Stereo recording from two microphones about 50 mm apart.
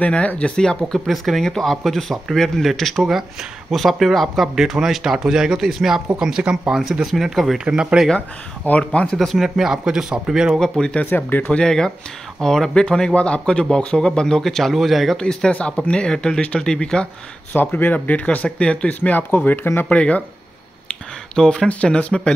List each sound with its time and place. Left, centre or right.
0.0 s speech: left
0.9 s speech: centre
7.6 s speech: right
8.6 s speech: left
9.0 s speech: centre
9.4 s speech: centre
10.6 s speech: centre
11.1 s speech: left
11.5 s speech: centre
15.1 s speech: centre
17.5 s speech: left
18.9 s speech: left
19.9 s speech: left
21.4 s speech: centre